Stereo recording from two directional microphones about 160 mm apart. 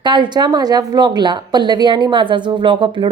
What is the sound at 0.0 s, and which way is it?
Speech, 30° right (ahead or behind).